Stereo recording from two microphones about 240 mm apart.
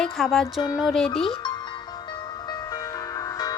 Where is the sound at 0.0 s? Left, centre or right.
Centre.